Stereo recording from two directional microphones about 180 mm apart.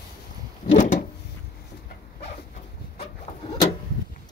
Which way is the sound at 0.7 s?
40° left (ahead or behind).